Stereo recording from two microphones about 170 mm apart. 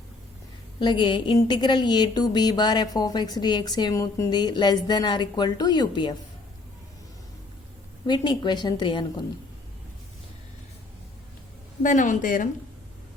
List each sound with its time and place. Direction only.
0.8 s a woman's voice: 25° left (ahead or behind)
8.0 s a woman's voice: 25° left (ahead or behind)
11.8 s speech: 45° left (ahead or behind)